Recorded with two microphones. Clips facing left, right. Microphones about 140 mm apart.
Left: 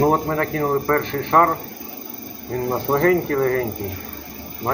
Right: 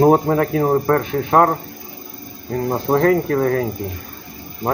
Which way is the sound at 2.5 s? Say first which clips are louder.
Right 2 dB; 5° right (ahead or behind).